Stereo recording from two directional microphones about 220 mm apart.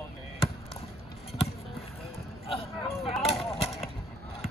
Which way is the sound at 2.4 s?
25° left (ahead or behind).